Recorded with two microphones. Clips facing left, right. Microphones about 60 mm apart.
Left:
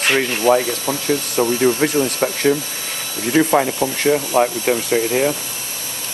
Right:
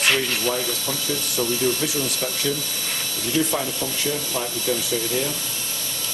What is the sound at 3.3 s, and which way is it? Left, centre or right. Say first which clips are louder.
Speech: left 9 dB; left.